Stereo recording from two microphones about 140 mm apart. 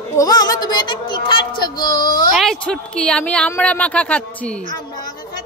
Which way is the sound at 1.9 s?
90° left.